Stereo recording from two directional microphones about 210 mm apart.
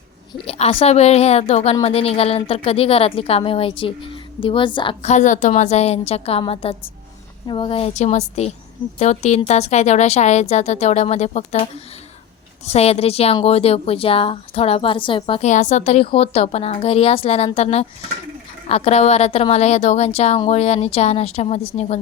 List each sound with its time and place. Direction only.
0.3 s a woman's voice: 30° left (ahead or behind)